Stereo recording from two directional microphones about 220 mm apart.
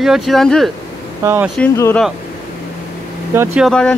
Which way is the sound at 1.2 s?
10° right (ahead or behind).